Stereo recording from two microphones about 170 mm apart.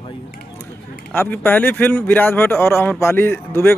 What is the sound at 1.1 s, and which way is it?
Speech, 10° left (ahead or behind).